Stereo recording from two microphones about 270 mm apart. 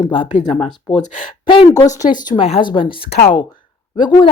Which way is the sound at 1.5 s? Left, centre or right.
Centre.